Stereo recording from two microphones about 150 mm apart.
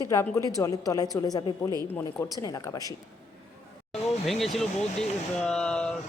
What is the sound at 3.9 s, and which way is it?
Speech, centre (ahead or behind).